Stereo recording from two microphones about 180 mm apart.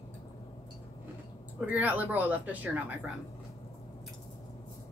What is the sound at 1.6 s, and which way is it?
Speech, 10° right (ahead or behind).